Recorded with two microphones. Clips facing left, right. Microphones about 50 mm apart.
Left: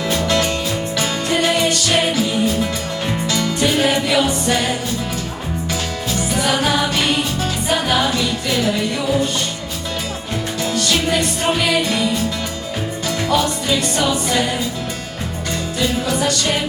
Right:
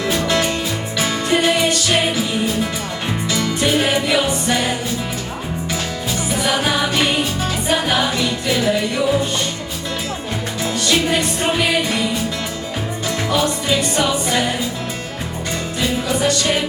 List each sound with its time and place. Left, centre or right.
0.1 s music: centre
6.4 s music: centre
10.6 s music: centre
13.1 s music: centre
13.4 s music: right
15.8 s music: centre